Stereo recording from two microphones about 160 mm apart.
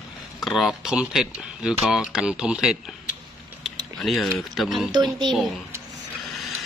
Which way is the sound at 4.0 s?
5° left (ahead or behind).